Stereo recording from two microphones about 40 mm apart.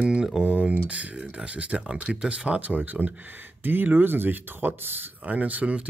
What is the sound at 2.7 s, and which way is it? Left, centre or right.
Speech, right.